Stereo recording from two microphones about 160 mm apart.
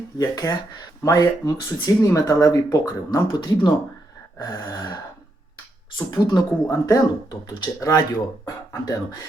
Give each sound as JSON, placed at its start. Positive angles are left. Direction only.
{"t": 0.2, "sound": "speech", "side_deg": 20}
{"t": 6.1, "sound": "speech", "side_deg": 25}